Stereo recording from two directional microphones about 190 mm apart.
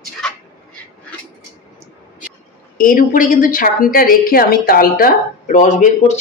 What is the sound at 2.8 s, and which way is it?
A woman's voice, 45° left (ahead or behind).